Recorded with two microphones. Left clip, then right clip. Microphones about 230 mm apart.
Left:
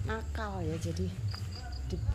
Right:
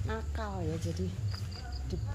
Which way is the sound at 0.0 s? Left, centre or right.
Centre.